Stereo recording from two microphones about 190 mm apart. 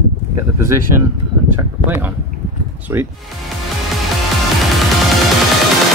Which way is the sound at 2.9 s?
15° right (ahead or behind).